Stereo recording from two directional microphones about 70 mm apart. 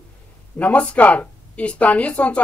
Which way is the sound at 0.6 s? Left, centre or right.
Left.